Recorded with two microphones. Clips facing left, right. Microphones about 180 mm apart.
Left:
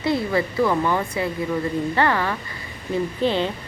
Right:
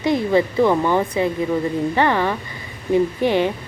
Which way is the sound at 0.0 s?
15° right (ahead or behind).